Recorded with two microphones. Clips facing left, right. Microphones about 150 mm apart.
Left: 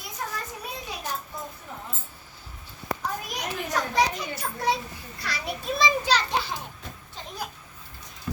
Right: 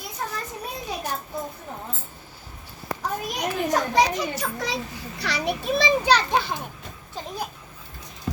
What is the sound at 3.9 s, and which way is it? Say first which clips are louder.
A child's voice: right 4 dB; 90° right.